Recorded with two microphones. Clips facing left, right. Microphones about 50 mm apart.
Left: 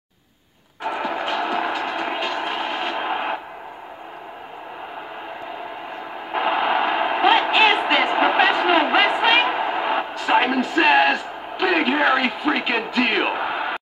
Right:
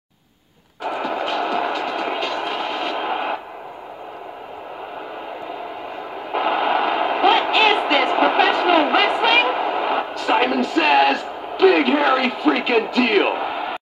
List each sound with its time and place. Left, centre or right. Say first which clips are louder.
0.8 s vehicle: right 1 dB; centre
6.3 s radio: right 1 dB; left
7.8 s a sound: right 1 dB; left